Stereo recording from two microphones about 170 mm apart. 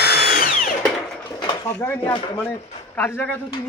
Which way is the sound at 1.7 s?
10° left (ahead or behind).